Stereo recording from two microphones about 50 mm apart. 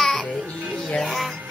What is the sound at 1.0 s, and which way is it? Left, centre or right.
Music, centre.